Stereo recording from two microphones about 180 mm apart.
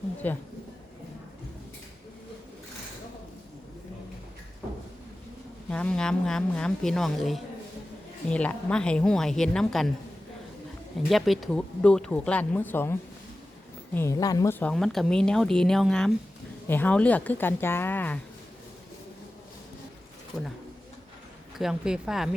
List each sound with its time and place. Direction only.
0.2 s speech: 10° left (ahead or behind)
5.7 s speech: 5° left (ahead or behind)
11.1 s speech: centre (ahead or behind); by 14.5 s 20° left (ahead or behind)
14.6 s speech: 5° left (ahead or behind)
21.6 s speech: 5° right (ahead or behind)